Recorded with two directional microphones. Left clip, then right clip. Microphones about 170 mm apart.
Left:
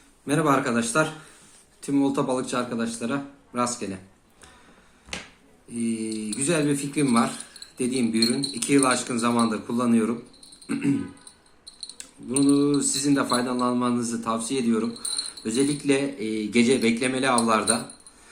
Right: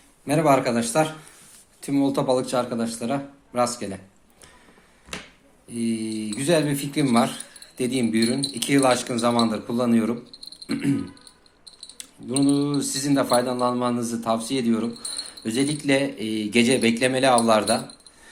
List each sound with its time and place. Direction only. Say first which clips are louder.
0.3 s a man's voice: right 3 dB; 25° right (ahead or behind)
5.7 s speech: right 2 dB; 35° right (ahead or behind)
11.9 s speech: right 1 dB; 35° right (ahead or behind)